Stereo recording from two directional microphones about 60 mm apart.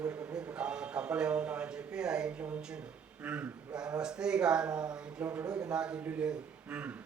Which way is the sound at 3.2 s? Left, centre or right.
Right.